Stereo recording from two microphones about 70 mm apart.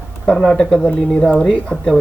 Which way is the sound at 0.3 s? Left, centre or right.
Centre.